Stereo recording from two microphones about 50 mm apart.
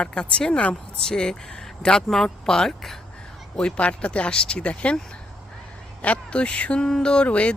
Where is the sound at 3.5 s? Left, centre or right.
Left.